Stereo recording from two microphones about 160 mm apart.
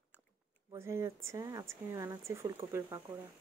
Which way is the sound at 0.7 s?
15° right (ahead or behind).